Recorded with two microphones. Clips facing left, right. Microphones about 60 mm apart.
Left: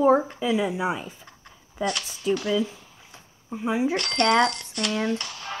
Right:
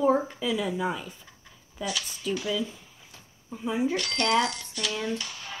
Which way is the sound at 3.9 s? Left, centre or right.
Left.